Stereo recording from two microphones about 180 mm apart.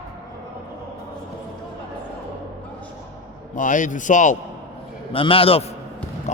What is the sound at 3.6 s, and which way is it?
Speech, 45° left (ahead or behind).